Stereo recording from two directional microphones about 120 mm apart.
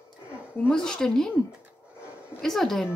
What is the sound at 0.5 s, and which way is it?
Speech, 10° left (ahead or behind).